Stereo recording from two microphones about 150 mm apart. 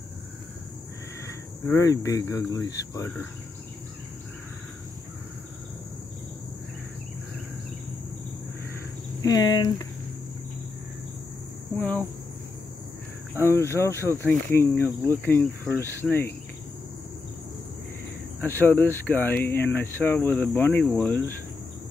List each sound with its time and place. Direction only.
1.2 s speech: 20° left (ahead or behind)
9.2 s speech: 25° left (ahead or behind)
13.3 s speech: 15° left (ahead or behind)
18.4 s speech: 15° left (ahead or behind)